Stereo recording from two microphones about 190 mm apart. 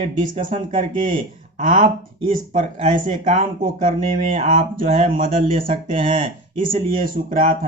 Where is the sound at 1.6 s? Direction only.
40° right (ahead or behind).